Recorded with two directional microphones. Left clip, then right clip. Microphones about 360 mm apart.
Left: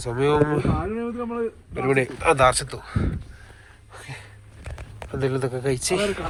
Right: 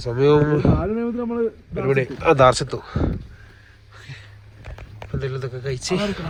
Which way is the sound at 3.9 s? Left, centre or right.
Centre.